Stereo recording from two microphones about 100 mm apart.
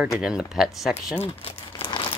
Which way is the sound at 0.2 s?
5° right (ahead or behind).